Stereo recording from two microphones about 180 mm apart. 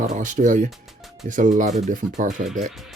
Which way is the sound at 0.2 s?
45° right (ahead or behind).